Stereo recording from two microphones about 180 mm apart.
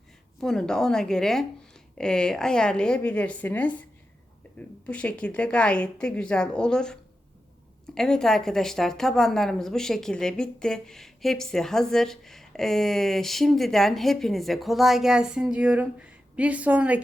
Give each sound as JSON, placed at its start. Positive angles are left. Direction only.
{"t": 0.3, "sound": "a woman's voice", "side_deg": 5}
{"t": 4.9, "sound": "a woman's voice", "side_deg": 5}